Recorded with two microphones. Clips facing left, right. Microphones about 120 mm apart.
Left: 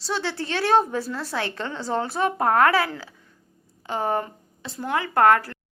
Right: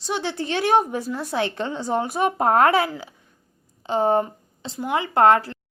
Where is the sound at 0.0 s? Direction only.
15° right (ahead or behind).